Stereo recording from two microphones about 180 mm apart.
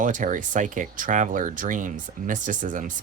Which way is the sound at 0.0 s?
45° right (ahead or behind).